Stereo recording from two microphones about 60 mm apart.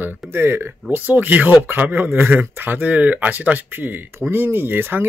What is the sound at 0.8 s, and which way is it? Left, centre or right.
Speech, right.